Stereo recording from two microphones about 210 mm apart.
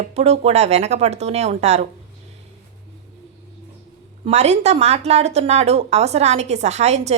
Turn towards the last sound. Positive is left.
turn(degrees=-30)  # may be behind; listen again after turning